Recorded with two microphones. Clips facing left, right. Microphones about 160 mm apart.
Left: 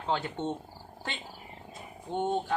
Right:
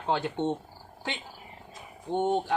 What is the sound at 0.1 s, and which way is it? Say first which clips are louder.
Speech: right 3 dB; 15° right (ahead or behind).